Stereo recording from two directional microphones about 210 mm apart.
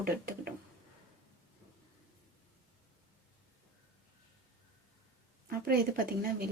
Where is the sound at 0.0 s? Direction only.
45° right (ahead or behind).